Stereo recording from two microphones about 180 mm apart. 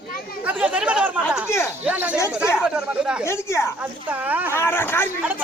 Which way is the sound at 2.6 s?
5° right (ahead or behind).